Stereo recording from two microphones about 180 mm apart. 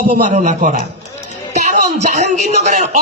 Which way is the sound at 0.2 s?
45° right (ahead or behind).